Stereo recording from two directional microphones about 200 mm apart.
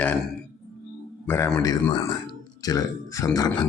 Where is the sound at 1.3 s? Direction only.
10° left (ahead or behind).